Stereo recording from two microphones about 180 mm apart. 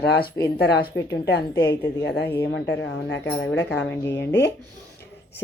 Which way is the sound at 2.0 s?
70° left (ahead or behind).